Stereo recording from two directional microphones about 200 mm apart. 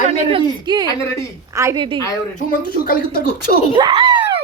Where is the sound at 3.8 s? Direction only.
20° right (ahead or behind).